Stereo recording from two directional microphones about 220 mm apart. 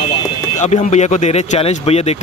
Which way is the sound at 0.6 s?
30° left (ahead or behind).